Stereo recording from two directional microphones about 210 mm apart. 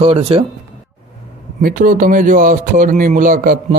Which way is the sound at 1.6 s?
40° right (ahead or behind).